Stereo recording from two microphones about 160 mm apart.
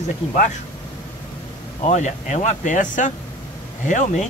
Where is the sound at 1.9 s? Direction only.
45° left (ahead or behind).